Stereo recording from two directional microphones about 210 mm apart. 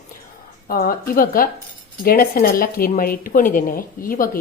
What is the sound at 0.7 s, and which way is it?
A woman's voice, 45° left (ahead or behind).